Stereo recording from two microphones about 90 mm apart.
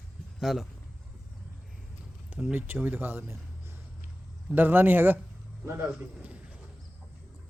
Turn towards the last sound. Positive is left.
turn(degrees=-20)  # may be behind; listen again after turning